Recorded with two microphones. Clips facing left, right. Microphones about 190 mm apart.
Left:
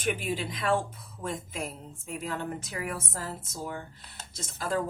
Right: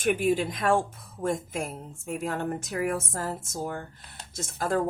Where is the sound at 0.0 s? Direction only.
50° right (ahead or behind).